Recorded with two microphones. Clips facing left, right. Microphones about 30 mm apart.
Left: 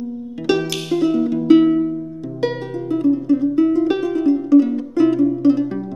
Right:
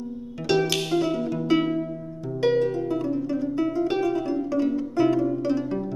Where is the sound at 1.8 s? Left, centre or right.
Centre.